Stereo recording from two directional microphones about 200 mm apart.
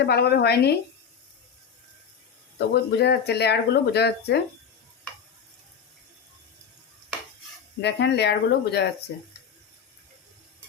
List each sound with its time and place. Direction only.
0.0 s a woman's voice: 55° left (ahead or behind)
2.6 s speech: 55° left (ahead or behind)
7.8 s speech: 55° left (ahead or behind)